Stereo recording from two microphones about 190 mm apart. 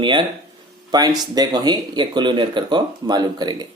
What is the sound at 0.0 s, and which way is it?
Speech, 25° right (ahead or behind).